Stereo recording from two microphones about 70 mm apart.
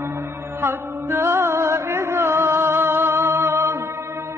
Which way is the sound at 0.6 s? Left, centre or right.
Right.